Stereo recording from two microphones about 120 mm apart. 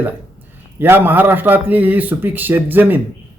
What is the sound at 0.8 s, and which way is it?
Speech, 15° right (ahead or behind).